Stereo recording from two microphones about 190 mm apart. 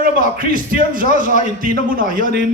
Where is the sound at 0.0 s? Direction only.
45° right (ahead or behind).